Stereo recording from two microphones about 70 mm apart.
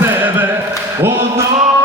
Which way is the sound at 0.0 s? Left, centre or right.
Right.